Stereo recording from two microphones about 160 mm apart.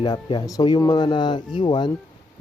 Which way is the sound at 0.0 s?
30° left (ahead or behind).